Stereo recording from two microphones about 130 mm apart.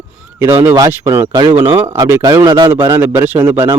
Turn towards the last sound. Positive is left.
turn(degrees=-20)  # may be behind; listen again after turning